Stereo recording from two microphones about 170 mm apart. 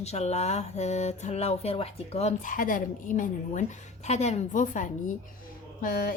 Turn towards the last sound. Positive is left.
turn(degrees=60)  # may be behind; listen again after turning